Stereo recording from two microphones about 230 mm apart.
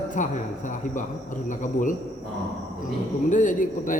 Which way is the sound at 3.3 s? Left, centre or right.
Left.